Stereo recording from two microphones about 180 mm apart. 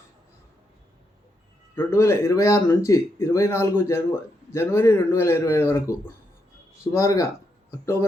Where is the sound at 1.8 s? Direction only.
15° left (ahead or behind).